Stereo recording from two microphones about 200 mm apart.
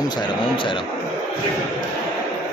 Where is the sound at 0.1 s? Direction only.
25° left (ahead or behind).